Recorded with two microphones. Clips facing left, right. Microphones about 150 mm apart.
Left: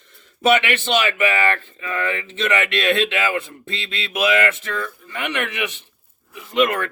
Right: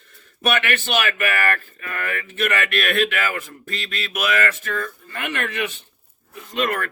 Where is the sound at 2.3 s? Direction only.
20° left (ahead or behind).